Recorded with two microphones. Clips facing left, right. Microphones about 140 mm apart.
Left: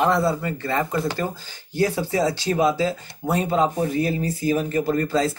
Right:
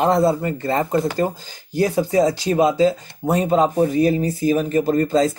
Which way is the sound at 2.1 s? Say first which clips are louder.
Right 7 dB; 25° right (ahead or behind).